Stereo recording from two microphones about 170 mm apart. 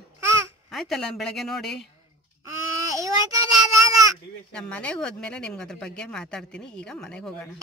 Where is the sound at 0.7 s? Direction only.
Centre (ahead or behind).